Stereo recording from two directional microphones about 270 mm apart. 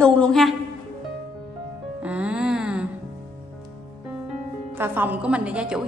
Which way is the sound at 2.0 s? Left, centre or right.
Centre.